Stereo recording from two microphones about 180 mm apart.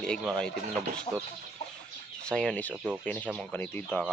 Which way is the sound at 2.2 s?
5° left (ahead or behind).